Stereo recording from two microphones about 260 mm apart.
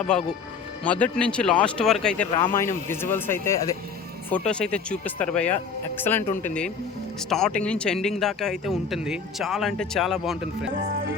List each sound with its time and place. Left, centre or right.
0.9 s speech: centre
2.3 s speech: centre